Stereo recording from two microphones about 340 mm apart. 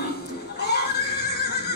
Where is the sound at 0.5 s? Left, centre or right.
Left.